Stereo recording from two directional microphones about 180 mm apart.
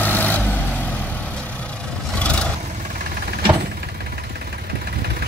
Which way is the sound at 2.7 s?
45° right (ahead or behind).